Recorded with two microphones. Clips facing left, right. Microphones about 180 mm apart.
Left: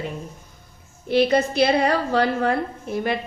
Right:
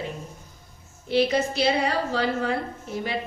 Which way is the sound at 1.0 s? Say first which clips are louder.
Left 4 dB; 60° left (ahead or behind).